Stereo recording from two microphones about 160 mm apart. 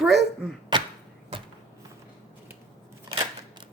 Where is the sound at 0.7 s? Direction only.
30° right (ahead or behind).